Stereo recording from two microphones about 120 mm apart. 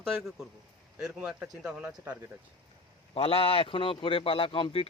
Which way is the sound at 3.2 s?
50° left (ahead or behind).